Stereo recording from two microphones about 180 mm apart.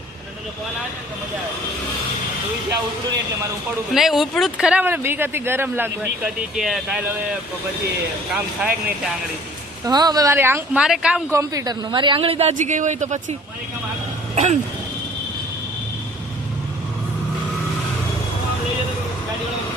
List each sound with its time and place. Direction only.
3.9 s speech: centre (ahead or behind)
9.8 s speech: 20° right (ahead or behind); by 11.2 s 5° right (ahead or behind)
11.3 s a man's voice: 15° right (ahead or behind); by 13.3 s 40° right (ahead or behind)
14.3 s a man's voice: 40° right (ahead or behind)